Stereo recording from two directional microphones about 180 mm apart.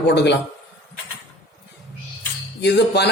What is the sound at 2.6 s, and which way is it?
Speech, 70° left (ahead or behind).